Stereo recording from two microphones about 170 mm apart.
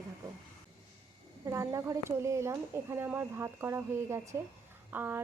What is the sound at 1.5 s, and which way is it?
Speech, 20° right (ahead or behind).